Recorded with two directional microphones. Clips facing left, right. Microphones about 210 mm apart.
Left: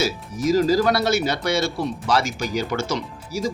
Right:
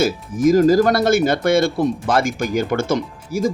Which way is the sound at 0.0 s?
50° right (ahead or behind).